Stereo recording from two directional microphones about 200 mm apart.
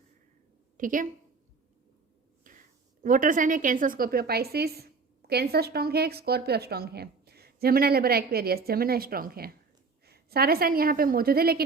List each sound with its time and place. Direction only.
0.8 s a woman's voice: 40° right (ahead or behind)
2.5 s a sound: 40° right (ahead or behind)
3.0 s speech: 45° right (ahead or behind)